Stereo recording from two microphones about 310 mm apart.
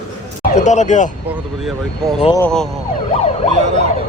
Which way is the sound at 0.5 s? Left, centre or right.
Left.